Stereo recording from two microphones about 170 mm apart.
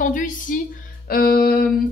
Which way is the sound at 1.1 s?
60° left (ahead or behind).